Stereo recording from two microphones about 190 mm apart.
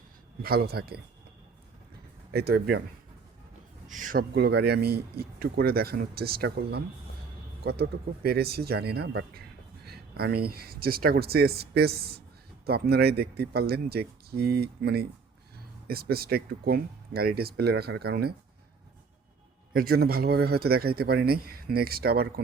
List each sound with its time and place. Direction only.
0.4 s speech: 55° right (ahead or behind)
2.3 s speech: 55° right (ahead or behind)
3.8 s speech: 45° right (ahead or behind)
19.7 s speech: 50° right (ahead or behind)